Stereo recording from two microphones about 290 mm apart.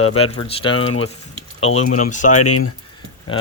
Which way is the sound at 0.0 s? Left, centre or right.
Left.